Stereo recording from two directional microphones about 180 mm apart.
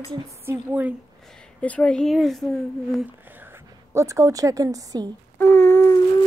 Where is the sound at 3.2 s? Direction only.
10° right (ahead or behind).